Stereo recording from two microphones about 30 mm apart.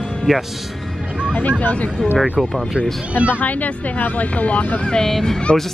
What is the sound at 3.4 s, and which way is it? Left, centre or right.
Speech, left.